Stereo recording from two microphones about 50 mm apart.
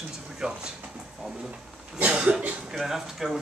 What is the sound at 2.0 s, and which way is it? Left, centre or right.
Speech, centre.